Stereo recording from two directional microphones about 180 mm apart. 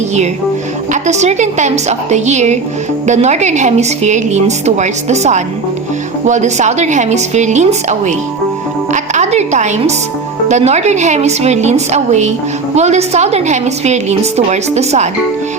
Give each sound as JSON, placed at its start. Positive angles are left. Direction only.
{"t": 1.0, "sound": "a woman's voice", "side_deg": -40}